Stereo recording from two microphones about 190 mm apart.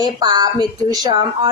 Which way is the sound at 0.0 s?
20° right (ahead or behind).